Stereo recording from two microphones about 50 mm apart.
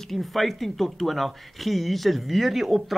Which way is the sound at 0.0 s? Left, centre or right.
Centre.